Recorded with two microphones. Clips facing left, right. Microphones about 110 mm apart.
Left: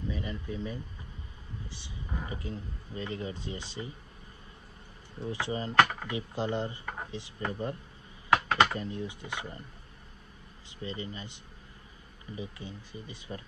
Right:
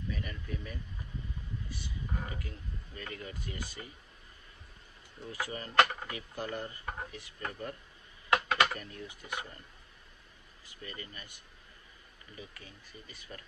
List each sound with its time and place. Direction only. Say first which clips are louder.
0.1 s a sound: left 4 dB; 20° left (ahead or behind)
1.7 s speech: left 1 dB; 20° left (ahead or behind)
5.2 s speech: left 6 dB; 25° left (ahead or behind)
10.8 s speech: left 8 dB; 25° left (ahead or behind)